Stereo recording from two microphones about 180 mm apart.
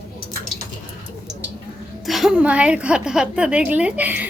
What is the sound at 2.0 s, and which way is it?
A woman's voice, centre (ahead or behind).